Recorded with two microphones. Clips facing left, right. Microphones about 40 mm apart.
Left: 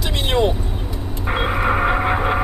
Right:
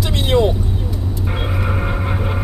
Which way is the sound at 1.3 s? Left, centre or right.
Left.